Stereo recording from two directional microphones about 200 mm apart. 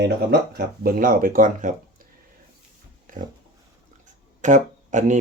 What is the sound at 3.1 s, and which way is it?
Pig, 40° right (ahead or behind).